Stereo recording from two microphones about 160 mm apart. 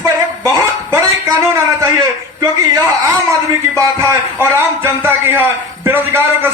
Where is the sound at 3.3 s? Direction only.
20° right (ahead or behind).